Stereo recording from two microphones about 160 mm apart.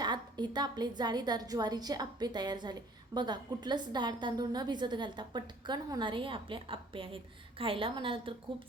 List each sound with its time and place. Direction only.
0.0 s a woman's voice: 25° right (ahead or behind)